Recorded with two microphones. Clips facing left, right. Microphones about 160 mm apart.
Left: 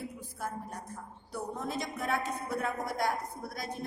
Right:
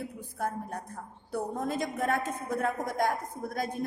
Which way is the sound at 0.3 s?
60° right (ahead or behind).